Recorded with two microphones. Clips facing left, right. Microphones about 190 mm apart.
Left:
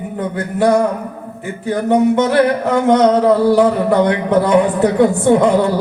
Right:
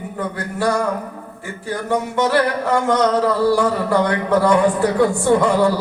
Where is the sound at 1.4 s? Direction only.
20° left (ahead or behind).